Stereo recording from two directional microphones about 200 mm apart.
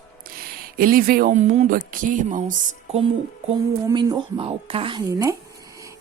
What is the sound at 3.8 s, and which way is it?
Speech, 20° right (ahead or behind).